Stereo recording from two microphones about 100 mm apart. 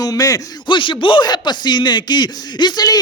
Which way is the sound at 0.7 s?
55° left (ahead or behind).